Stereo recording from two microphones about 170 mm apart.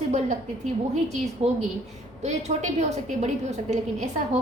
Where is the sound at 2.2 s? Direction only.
40° right (ahead or behind).